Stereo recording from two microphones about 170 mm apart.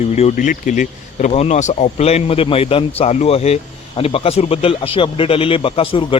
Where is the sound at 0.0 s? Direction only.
40° left (ahead or behind).